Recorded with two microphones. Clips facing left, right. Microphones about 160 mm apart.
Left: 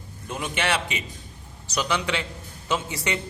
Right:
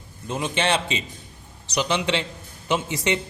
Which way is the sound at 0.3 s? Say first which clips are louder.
Right 3 dB; 25° right (ahead or behind).